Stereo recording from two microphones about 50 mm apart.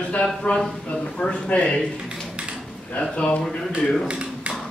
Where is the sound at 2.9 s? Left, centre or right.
Left.